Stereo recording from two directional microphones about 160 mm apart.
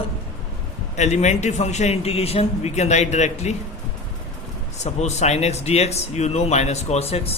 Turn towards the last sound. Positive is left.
turn(degrees=40)  # may be behind; listen again after turning